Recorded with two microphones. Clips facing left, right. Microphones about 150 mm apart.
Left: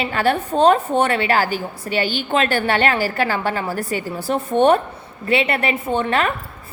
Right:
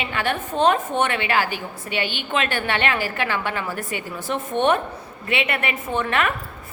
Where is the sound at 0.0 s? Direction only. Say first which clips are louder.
Left 6 dB; 35° left (ahead or behind).